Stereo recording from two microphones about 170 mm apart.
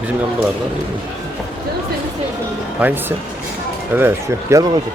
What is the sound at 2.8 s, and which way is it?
Speech, 10° right (ahead or behind).